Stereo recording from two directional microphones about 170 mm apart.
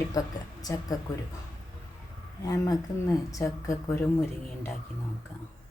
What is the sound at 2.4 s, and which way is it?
Speech, 20° left (ahead or behind).